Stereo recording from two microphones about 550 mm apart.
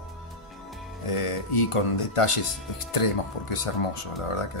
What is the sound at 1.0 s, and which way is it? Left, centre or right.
Speech, left.